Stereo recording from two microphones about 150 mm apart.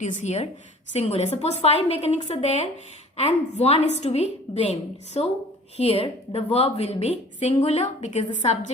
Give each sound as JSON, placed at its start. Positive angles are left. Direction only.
{"t": 0.0, "sound": "a woman's voice", "side_deg": 55}